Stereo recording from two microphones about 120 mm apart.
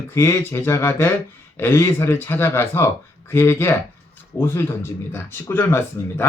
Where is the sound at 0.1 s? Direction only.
25° left (ahead or behind).